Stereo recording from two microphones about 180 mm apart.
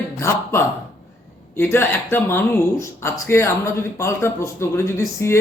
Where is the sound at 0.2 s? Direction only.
15° left (ahead or behind).